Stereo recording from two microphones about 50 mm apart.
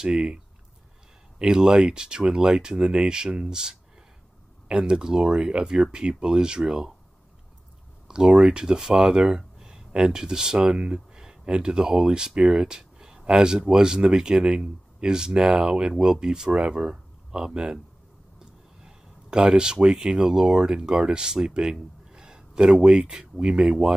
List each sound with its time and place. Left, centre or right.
0.0 s speech: centre
1.4 s speech: centre
8.1 s speech: centre